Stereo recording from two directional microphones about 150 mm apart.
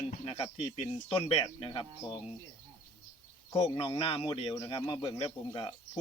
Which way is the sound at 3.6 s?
35° left (ahead or behind).